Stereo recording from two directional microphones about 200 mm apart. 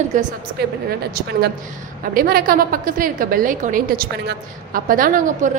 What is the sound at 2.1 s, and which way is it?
A woman's voice, 45° right (ahead or behind).